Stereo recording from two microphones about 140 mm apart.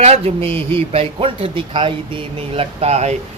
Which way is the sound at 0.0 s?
50° right (ahead or behind).